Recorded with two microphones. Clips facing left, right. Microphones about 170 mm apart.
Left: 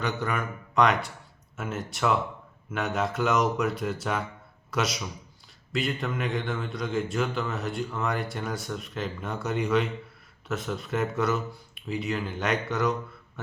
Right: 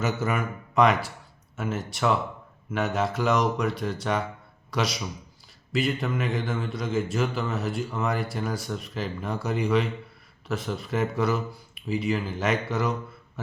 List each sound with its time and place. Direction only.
0.0 s a man's voice: 5° right (ahead or behind)